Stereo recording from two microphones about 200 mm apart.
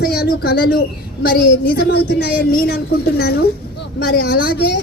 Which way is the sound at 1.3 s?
50° left (ahead or behind).